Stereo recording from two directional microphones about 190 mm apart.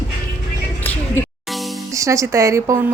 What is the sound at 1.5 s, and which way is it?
Music, centre (ahead or behind).